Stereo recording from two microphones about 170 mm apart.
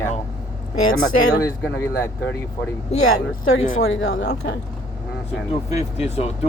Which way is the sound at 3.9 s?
90° left.